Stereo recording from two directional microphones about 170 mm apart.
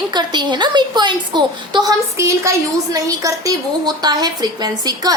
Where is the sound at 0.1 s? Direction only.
25° right (ahead or behind).